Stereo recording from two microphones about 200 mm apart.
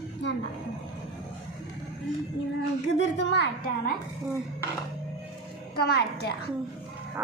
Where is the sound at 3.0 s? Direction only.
55° left (ahead or behind).